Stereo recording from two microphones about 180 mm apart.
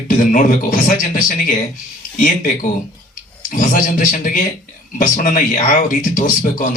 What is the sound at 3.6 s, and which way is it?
A man's voice, 50° left (ahead or behind).